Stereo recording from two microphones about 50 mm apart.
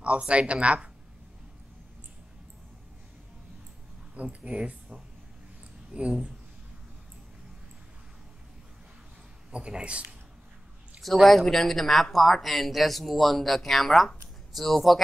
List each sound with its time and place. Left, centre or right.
0.0 s speech: right
4.1 s a sound: right
4.4 s speech: right
9.5 s speech: right
11.2 s speech: centre